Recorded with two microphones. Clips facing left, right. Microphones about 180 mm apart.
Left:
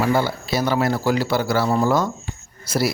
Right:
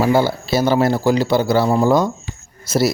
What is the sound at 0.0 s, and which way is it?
A man's voice, 30° right (ahead or behind).